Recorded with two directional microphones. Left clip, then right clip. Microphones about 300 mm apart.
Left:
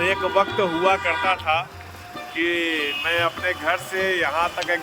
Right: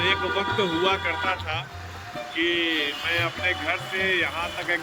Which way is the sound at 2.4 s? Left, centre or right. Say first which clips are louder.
Left 1 dB; centre.